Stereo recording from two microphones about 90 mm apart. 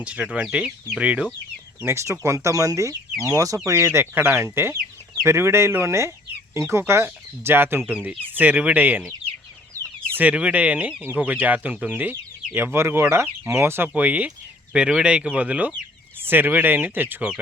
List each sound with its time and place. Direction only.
0.0 s speech: 10° right (ahead or behind)
1.8 s speech: 30° right (ahead or behind)
10.2 s speech: 15° right (ahead or behind)